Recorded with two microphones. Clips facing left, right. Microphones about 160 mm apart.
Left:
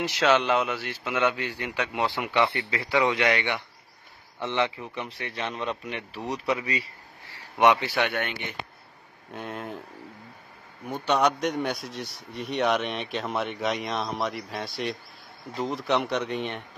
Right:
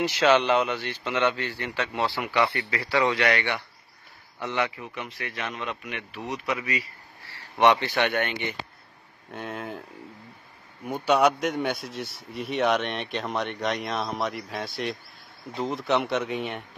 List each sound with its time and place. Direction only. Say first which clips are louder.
0.0 s a man's voice: right 2 dB; centre (ahead or behind); by 6.8 s 30° left (ahead or behind)
7.2 s speech: even; 10° left (ahead or behind)
10.9 s speech: right 2 dB; 5° right (ahead or behind)